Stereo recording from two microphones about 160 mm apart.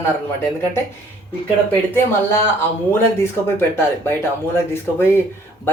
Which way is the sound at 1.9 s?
15° left (ahead or behind).